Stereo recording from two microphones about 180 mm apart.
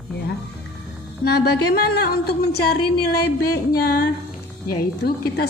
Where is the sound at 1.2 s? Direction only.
60° left (ahead or behind).